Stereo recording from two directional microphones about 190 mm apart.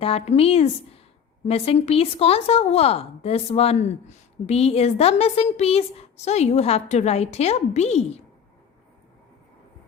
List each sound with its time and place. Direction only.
0.0 s a woman's voice: 30° left (ahead or behind)